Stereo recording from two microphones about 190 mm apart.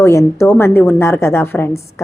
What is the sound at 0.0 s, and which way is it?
A woman's voice, 15° left (ahead or behind).